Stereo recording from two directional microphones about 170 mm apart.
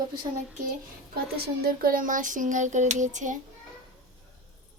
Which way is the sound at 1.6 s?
60° right (ahead or behind).